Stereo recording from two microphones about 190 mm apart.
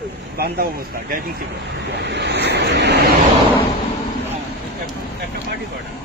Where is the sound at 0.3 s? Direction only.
55° right (ahead or behind).